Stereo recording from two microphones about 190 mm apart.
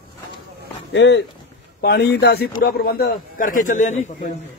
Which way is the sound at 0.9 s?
70° left (ahead or behind).